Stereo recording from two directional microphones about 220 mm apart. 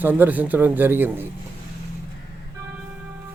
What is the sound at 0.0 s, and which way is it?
A man's voice, 10° right (ahead or behind).